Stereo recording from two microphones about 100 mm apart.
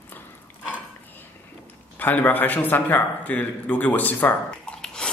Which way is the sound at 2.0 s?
20° left (ahead or behind).